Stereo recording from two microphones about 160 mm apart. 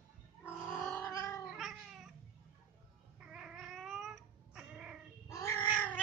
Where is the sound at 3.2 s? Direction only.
5° right (ahead or behind).